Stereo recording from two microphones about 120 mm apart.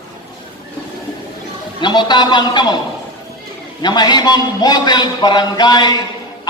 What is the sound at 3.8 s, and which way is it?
A man's voice, 35° left (ahead or behind).